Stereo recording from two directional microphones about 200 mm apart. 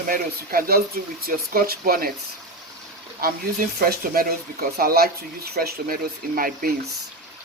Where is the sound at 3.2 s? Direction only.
50° right (ahead or behind).